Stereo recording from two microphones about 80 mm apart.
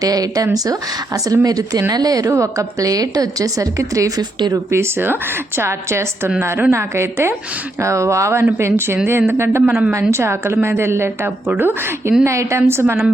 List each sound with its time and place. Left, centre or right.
0.0 s a woman's voice: right
4.2 s a woman's voice: right
4.7 s a woman's voice: right